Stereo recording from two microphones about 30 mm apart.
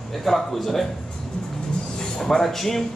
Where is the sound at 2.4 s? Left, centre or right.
Centre.